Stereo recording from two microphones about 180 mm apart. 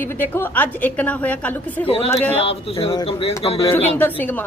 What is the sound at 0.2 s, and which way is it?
A man's voice, 10° left (ahead or behind).